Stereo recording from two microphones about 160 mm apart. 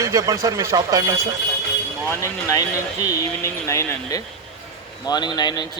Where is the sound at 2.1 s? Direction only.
20° left (ahead or behind).